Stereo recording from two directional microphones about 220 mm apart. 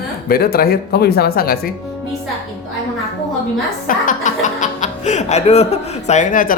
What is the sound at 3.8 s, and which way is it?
Speech, 35° left (ahead or behind).